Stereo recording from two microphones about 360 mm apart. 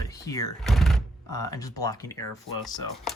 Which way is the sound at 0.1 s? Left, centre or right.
Centre.